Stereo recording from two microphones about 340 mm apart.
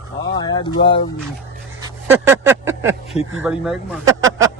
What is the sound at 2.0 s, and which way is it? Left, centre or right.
Speech, centre.